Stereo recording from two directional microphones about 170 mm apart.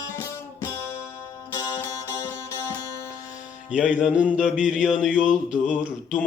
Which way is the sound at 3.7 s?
5° right (ahead or behind).